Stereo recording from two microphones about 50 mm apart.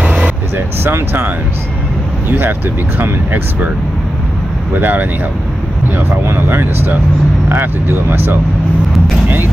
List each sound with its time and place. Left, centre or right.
0.0 s vehicle: right
0.6 s speech: right
2.3 s speech: right
4.7 s speech: right